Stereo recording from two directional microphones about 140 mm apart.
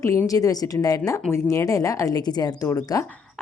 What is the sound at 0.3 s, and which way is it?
Speech, 25° left (ahead or behind).